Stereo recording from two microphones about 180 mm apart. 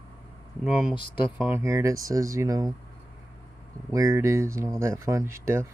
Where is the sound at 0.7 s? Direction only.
5° right (ahead or behind).